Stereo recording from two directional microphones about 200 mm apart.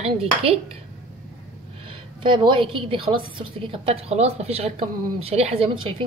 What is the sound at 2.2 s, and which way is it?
A woman's voice, 25° right (ahead or behind).